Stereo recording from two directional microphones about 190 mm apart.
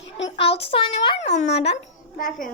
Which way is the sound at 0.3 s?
30° left (ahead or behind).